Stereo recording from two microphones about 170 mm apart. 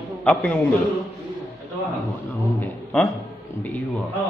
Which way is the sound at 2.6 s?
5° left (ahead or behind).